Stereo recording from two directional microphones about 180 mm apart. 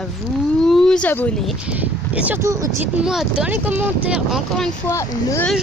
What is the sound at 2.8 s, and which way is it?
Speech, 5° right (ahead or behind).